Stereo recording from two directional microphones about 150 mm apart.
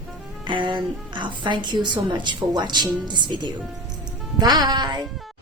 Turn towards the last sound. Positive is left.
turn(degrees=-30)  # may be behind; listen again after turning